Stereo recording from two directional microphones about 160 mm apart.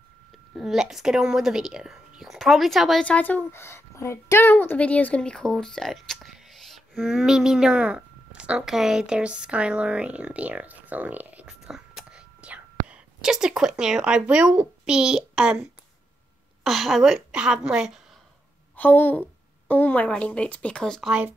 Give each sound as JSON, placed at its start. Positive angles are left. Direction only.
{"t": 0.6, "sound": "speech", "side_deg": 0}
{"t": 16.6, "sound": "a woman's voice", "side_deg": 0}
{"t": 18.8, "sound": "speech", "side_deg": 10}